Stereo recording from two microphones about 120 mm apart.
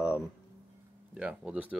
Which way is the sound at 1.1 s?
10° right (ahead or behind).